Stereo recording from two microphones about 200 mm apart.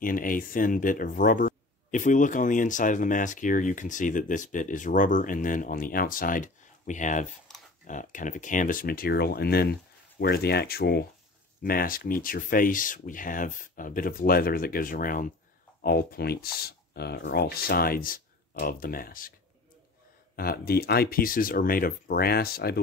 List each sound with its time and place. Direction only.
0.0 s speech: 45° left (ahead or behind)
20.3 s speech: 50° left (ahead or behind)